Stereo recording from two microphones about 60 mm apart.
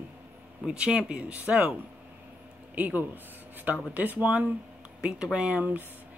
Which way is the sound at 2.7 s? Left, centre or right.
Right.